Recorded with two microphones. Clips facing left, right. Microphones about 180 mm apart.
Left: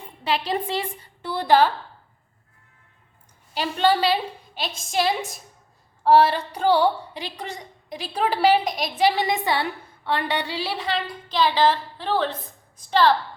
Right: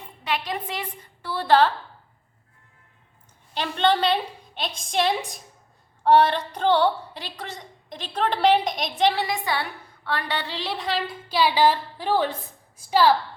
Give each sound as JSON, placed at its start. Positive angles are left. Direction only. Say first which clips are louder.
{"t": 0.3, "sound": "a woman's voice", "louder": "left 4 dB", "side_deg": 30}
{"t": 1.3, "sound": "a woman's voice", "louder": "left 1 dB", "side_deg": 15}
{"t": 3.5, "sound": "a woman's voice", "louder": "left 1 dB", "side_deg": 10}
{"t": 9.1, "sound": "a woman's voice", "louder": "left 3 dB", "side_deg": 20}